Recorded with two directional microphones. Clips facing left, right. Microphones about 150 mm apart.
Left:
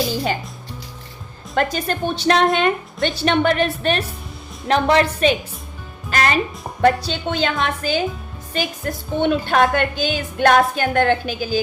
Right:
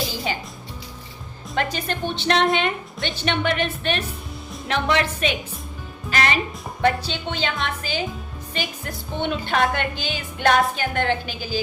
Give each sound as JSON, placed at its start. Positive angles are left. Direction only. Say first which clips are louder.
{"t": 1.5, "sound": "a woman's voice", "louder": "left 5 dB", "side_deg": 45}
{"t": 6.1, "sound": "music", "louder": "left 3 dB", "side_deg": 40}
{"t": 6.8, "sound": "a woman's voice", "louder": "left 5 dB", "side_deg": 40}